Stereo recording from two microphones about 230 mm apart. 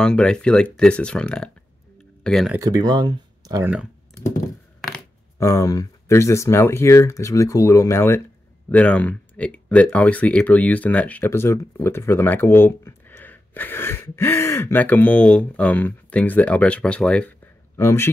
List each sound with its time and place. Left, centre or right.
0.0 s speech: centre
2.6 s speech: centre
5.4 s speech: centre